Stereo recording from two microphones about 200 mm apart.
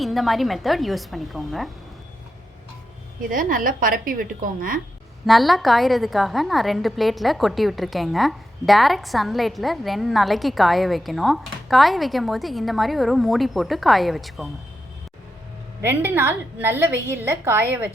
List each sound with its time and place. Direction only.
0.0 s a woman's voice: centre (ahead or behind)
3.2 s a woman's voice: 45° right (ahead or behind)
5.2 s a woman's voice: centre (ahead or behind)
15.8 s a woman's voice: 10° right (ahead or behind)